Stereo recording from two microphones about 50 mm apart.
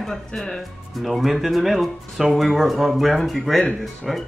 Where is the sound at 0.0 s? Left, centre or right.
Centre.